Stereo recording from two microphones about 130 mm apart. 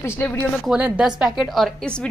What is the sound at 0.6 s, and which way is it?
Speech, 5° right (ahead or behind).